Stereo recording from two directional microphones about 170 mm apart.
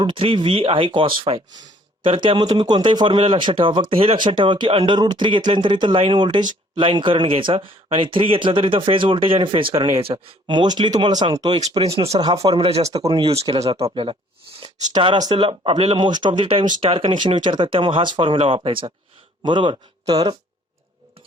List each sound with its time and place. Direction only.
0.0 s speech: 30° right (ahead or behind)
9.7 s speech: 20° right (ahead or behind)
10.0 s speech: 30° right (ahead or behind)